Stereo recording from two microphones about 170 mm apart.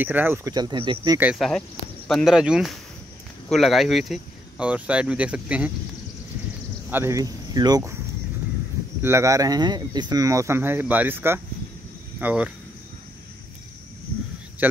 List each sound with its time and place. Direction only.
0.0 s speech: 10° right (ahead or behind); by 1.1 s 25° right (ahead or behind)
1.3 s speech: centre (ahead or behind)
6.9 s speech: 15° right (ahead or behind)
9.0 s speech: 15° right (ahead or behind)
14.6 s speech: 10° right (ahead or behind)